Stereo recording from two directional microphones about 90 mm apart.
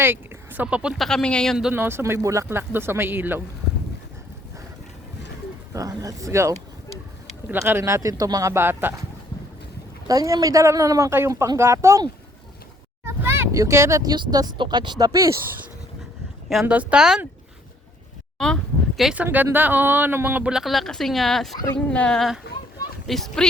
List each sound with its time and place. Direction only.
0.0 s a sound: 20° right (ahead or behind)
0.9 s speech: 5° left (ahead or behind)
1.7 s speech: 25° right (ahead or behind)
5.7 s speech: 40° right (ahead or behind)
7.4 s speech: 20° right (ahead or behind)
8.6 s speech: 25° right (ahead or behind)
10.1 s speech: 40° right (ahead or behind)
11.1 s speech: 30° right (ahead or behind)
13.1 s vehicle: 30° right (ahead or behind)
14.1 s speech: 50° right (ahead or behind)
16.6 s speech: 10° right (ahead or behind)
18.3 s a sound: 5° left (ahead or behind)
19.1 s speech: 20° right (ahead or behind)
20.5 s speech: 5° right (ahead or behind)